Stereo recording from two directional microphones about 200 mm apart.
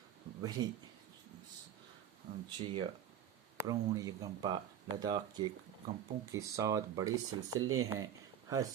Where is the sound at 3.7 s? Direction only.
15° right (ahead or behind).